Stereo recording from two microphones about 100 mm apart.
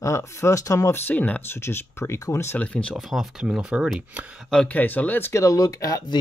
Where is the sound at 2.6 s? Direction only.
10° left (ahead or behind).